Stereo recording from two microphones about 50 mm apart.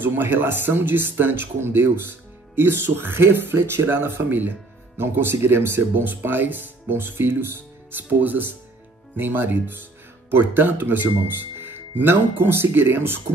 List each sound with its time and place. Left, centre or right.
0.0 s speech: right